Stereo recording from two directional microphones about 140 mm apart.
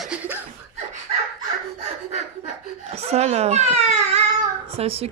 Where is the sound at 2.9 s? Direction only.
50° right (ahead or behind).